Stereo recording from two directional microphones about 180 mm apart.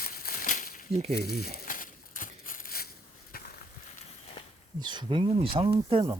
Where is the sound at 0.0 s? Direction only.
55° left (ahead or behind).